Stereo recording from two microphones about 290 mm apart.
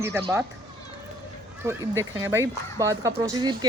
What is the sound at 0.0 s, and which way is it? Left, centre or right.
Speech, centre.